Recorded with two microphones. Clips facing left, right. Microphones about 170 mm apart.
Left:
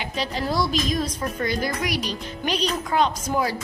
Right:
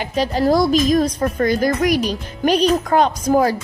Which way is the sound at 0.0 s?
45° right (ahead or behind).